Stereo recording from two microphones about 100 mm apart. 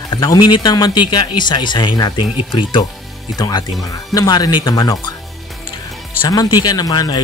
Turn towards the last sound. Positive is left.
turn(degrees=40)  # may be behind; listen again after turning